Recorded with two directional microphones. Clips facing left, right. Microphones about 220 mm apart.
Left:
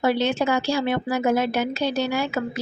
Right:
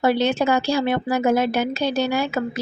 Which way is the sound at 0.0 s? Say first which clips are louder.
Right 2 dB; 40° right (ahead or behind).